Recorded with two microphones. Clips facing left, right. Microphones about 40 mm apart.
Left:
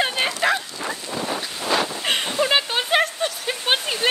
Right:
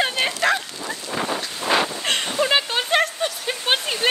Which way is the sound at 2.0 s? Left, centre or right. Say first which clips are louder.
Even; centre.